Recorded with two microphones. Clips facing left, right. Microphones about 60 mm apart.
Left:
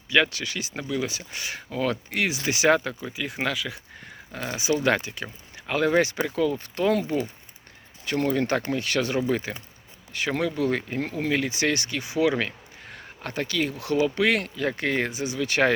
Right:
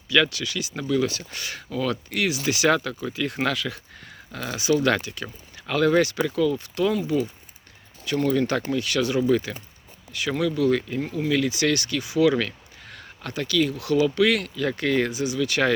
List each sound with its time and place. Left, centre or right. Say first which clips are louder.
0.1 s speech: right 1 dB; left
0.9 s speech: right 7 dB; centre
3.1 s speech: right 4 dB; centre
4.0 s speech: even; left